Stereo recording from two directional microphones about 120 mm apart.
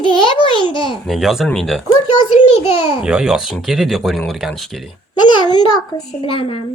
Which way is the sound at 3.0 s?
5° right (ahead or behind).